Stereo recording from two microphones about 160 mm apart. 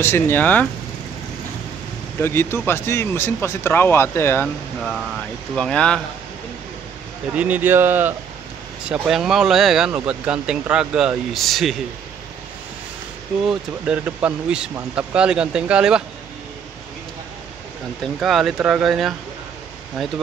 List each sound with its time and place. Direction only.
0.0 s speech: 15° left (ahead or behind)
2.2 s speech: 15° left (ahead or behind)
5.6 s speech: 5° left (ahead or behind)
7.3 s speech: 10° right (ahead or behind)
13.5 s speech: 5° right (ahead or behind)
18.0 s speech: centre (ahead or behind)